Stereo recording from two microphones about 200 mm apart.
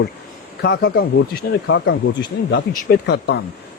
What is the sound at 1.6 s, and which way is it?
Speech, 70° left (ahead or behind).